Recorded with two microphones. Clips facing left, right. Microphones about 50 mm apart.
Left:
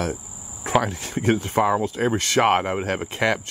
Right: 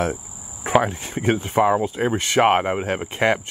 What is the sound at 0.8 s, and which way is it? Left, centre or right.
Speech, right.